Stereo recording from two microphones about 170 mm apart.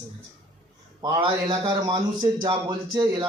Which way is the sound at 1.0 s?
30° right (ahead or behind).